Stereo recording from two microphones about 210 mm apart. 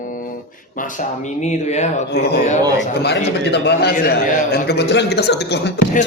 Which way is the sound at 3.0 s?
55° left (ahead or behind).